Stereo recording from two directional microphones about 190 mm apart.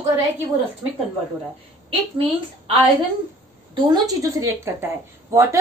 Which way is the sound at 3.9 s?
20° right (ahead or behind).